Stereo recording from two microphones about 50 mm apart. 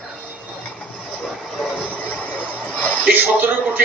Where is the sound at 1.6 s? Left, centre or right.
Right.